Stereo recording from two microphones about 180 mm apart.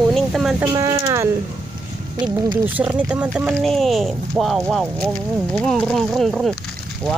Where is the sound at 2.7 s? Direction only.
10° right (ahead or behind).